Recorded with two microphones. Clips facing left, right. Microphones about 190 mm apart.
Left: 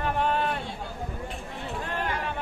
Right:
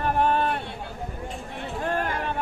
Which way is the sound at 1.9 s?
50° right (ahead or behind).